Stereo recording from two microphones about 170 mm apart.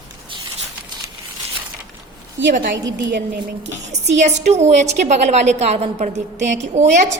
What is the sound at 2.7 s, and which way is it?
Speech, 90° right.